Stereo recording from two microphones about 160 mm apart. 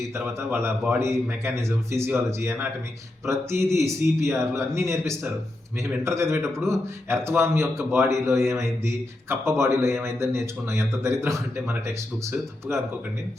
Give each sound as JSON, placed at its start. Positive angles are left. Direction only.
{"t": 0.1, "sound": "speech", "side_deg": -15}